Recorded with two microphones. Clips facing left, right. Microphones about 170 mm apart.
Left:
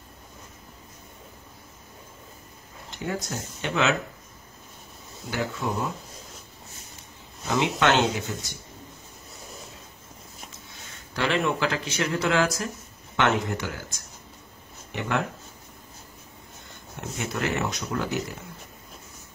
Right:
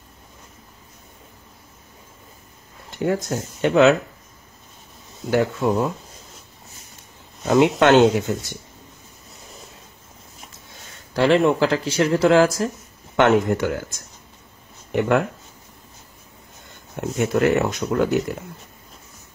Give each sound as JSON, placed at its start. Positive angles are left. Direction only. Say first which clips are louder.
{"t": 3.0, "sound": "speech", "louder": "right 9 dB", "side_deg": -50}
{"t": 5.3, "sound": "speech", "louder": "right 9 dB", "side_deg": -45}
{"t": 7.4, "sound": "speech", "louder": "right 8 dB", "side_deg": -50}
{"t": 10.7, "sound": "speech", "louder": "right 3 dB", "side_deg": -35}
{"t": 14.9, "sound": "speech", "louder": "right 9 dB", "side_deg": -50}
{"t": 16.9, "sound": "speech", "louder": "right 11 dB", "side_deg": -50}